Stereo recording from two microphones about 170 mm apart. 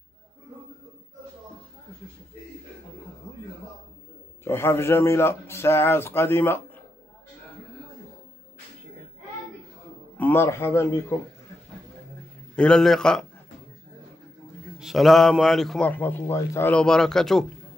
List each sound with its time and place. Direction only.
4.5 s a man's voice: 15° left (ahead or behind)
10.1 s a man's voice: 10° left (ahead or behind)
12.5 s a man's voice: 5° left (ahead or behind)
14.8 s a man's voice: centre (ahead or behind)